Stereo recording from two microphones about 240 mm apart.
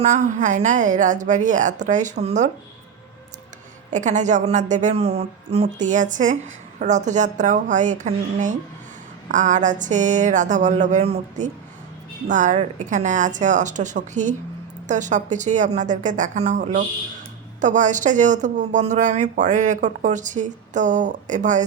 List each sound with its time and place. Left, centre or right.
0.0 s speech: right
3.9 s speech: right